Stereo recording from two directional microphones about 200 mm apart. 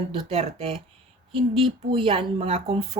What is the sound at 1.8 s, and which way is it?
Speech, 25° right (ahead or behind).